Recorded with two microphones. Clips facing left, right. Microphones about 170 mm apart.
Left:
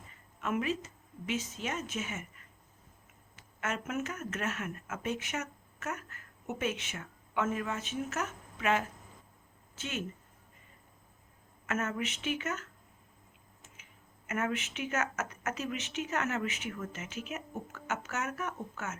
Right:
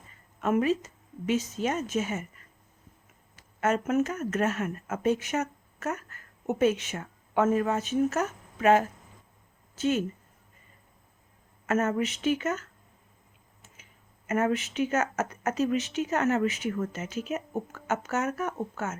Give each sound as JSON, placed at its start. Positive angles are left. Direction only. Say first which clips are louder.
{"t": 0.4, "sound": "speech", "louder": "right 8 dB", "side_deg": -40}
{"t": 3.6, "sound": "speech", "louder": "right 10 dB", "side_deg": -40}
{"t": 11.6, "sound": "speech", "louder": "right 8 dB", "side_deg": -40}
{"t": 14.3, "sound": "speech", "louder": "right 7 dB", "side_deg": -35}